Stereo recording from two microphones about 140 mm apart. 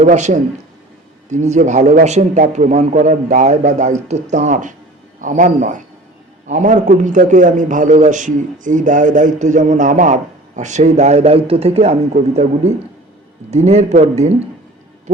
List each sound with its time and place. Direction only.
0.0 s a man's voice: 55° right (ahead or behind)